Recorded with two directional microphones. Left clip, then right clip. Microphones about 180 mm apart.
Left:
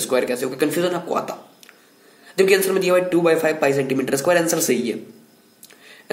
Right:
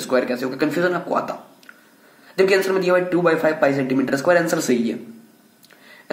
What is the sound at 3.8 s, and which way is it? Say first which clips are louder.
Speech: even; 35° left (ahead or behind).